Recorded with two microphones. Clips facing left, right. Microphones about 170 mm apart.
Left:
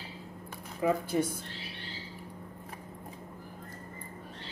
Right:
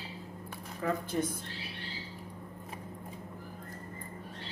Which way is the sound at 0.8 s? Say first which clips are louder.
Left 5 dB; 10° left (ahead or behind).